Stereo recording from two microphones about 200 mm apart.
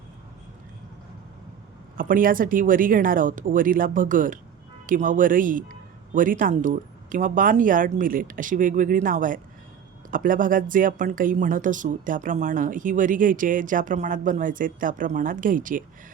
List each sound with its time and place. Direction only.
2.0 s speech: 45° right (ahead or behind)